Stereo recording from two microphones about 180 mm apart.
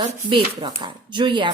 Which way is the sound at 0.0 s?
25° right (ahead or behind).